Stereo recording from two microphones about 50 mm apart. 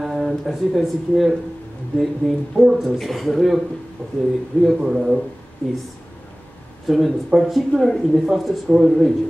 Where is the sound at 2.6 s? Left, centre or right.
Centre.